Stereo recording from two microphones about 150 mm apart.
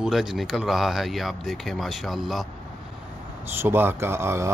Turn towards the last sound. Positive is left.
turn(degrees=-15)  # may be behind; listen again after turning